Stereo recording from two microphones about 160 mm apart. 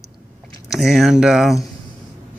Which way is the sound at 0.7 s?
Centre (ahead or behind).